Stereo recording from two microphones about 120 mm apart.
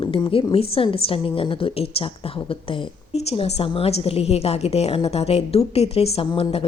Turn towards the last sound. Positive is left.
turn(degrees=55)  # may be behind; listen again after turning